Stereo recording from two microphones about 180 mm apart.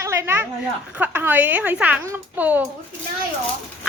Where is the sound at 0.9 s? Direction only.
10° right (ahead or behind).